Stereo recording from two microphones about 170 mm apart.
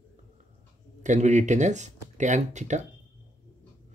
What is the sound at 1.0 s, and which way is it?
Speech, 45° right (ahead or behind).